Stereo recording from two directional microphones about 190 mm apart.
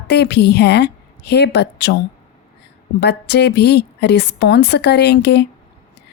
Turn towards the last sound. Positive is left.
turn(degrees=65)  # may be behind; listen again after turning